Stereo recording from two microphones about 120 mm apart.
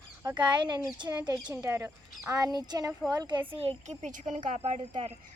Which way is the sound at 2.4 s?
35° right (ahead or behind).